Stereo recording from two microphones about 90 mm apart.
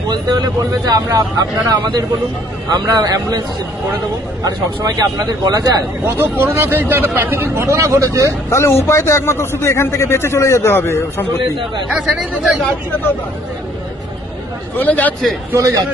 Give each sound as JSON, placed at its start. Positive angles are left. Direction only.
{"t": 0.1, "sound": "speech", "side_deg": -50}
{"t": 4.5, "sound": "speech", "side_deg": -45}
{"t": 6.0, "sound": "speech", "side_deg": -25}
{"t": 8.5, "sound": "a man's voice", "side_deg": 30}
{"t": 11.9, "sound": "speech", "side_deg": -5}
{"t": 14.8, "sound": "a man's voice", "side_deg": 20}